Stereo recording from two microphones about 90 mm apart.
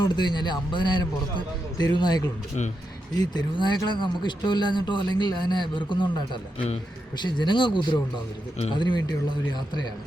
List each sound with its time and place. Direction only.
0.0 s a man's voice: 55° left (ahead or behind)